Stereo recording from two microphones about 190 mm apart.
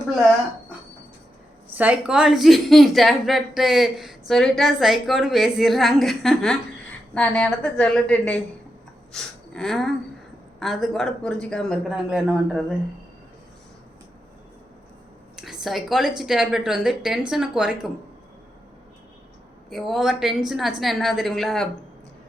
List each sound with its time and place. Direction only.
1.7 s a woman's voice: 10° right (ahead or behind)
15.4 s a woman's voice: centre (ahead or behind)
19.7 s a woman's voice: centre (ahead or behind)